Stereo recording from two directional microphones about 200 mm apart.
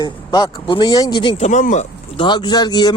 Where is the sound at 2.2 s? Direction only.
25° left (ahead or behind).